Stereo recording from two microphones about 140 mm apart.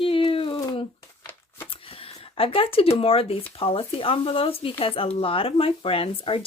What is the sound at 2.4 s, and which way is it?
Speech, 40° left (ahead or behind).